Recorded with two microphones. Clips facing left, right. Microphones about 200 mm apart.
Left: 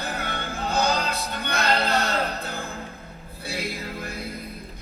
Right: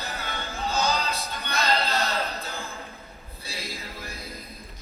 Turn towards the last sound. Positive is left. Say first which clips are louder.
# left 6 dB
turn(degrees=60)  # may be behind; listen again after turning